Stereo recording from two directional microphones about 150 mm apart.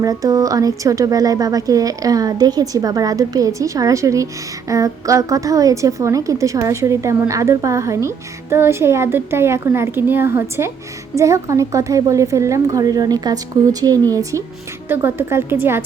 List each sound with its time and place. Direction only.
0.0 s a woman's voice: 25° right (ahead or behind)